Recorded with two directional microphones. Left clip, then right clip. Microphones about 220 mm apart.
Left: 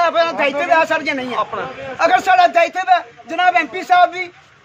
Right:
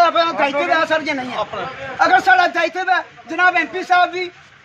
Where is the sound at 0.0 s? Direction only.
40° left (ahead or behind).